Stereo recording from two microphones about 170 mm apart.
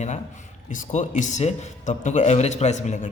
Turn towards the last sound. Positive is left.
turn(degrees=45)  # may be behind; listen again after turning